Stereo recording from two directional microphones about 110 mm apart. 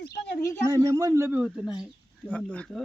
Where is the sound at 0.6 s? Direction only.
35° right (ahead or behind).